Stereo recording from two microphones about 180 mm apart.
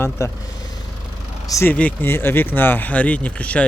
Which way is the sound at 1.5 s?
15° left (ahead or behind).